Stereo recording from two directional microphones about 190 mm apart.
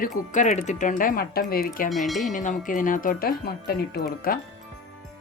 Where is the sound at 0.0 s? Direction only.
40° left (ahead or behind).